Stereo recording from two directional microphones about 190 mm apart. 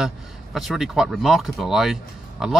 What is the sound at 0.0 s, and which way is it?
Speech, centre (ahead or behind).